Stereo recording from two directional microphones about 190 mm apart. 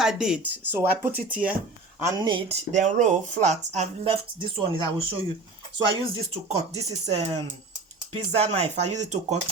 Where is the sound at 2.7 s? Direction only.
40° right (ahead or behind).